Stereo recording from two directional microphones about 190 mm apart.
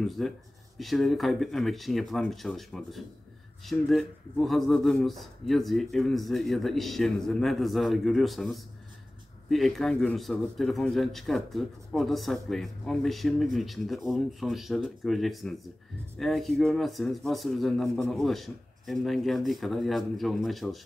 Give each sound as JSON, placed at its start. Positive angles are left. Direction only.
{"t": 0.0, "sound": "a man's voice", "side_deg": 0}